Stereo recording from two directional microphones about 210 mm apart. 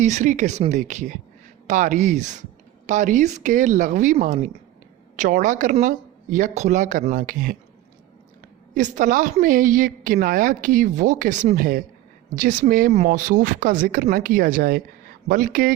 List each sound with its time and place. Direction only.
0.0 s a woman's voice: 35° right (ahead or behind)
8.7 s a woman's voice: 40° right (ahead or behind)